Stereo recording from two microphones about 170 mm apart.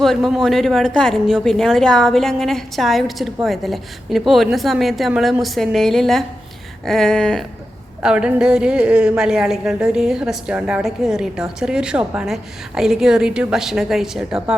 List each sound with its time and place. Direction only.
0.0 s a woman's voice: centre (ahead or behind)